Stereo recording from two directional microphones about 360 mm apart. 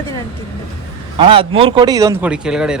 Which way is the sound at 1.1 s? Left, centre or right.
Centre.